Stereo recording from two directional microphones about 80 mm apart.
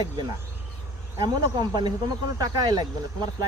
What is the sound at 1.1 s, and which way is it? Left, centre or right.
Speech, right.